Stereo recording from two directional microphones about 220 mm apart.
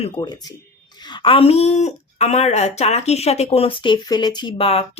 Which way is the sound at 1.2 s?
25° left (ahead or behind).